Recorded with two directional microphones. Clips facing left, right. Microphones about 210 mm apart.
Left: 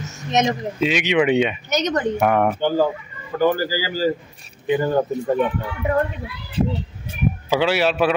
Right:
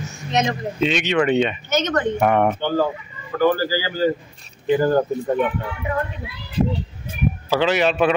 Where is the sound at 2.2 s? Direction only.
5° left (ahead or behind).